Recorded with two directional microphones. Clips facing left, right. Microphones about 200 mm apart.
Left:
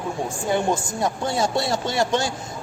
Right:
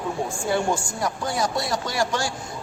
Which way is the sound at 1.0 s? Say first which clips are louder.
Left 3 dB; 25° left (ahead or behind).